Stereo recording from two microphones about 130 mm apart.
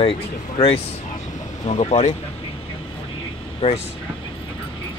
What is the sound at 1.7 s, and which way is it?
Speech, 55° left (ahead or behind).